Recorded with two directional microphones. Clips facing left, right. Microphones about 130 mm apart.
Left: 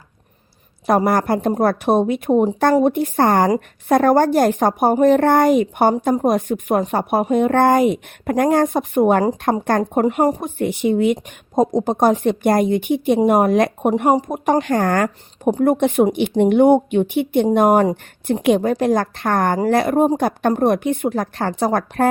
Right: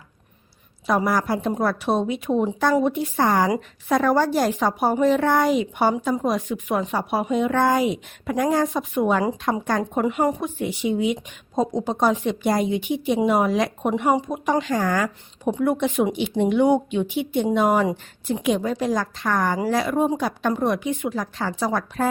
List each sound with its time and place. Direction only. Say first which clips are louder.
0.9 s a woman's voice: left 5 dB; 55° left (ahead or behind)
10.0 s a woman's voice: left 3 dB; 45° left (ahead or behind)